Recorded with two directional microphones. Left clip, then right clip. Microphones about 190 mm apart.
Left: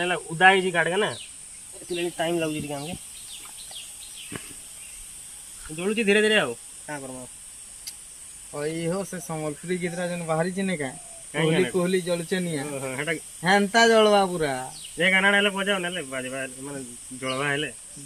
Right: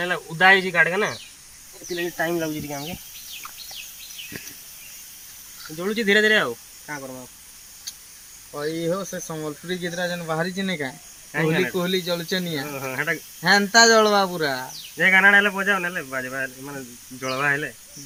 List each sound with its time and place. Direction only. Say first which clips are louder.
0.0 s speech: right 1 dB; 15° left (ahead or behind)
5.6 s speech: right 1 dB; 15° left (ahead or behind)
7.0 s speech: right 2 dB; 5° left (ahead or behind)
8.5 s speech: right 3 dB; 45° left (ahead or behind); by 10.9 s 10° left (ahead or behind)
11.3 s speech: right 1 dB; centre (ahead or behind)
12.6 s speech: right 3 dB; 10° right (ahead or behind)
13.4 s speech: right 4 dB; 15° left (ahead or behind)
14.9 s speech: right 5 dB; 5° right (ahead or behind)